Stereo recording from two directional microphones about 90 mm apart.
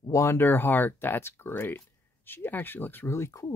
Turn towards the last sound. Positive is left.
turn(degrees=30)  # may be behind; listen again after turning